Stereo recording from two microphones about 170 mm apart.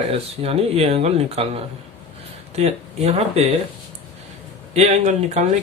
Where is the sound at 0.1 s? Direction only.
35° right (ahead or behind).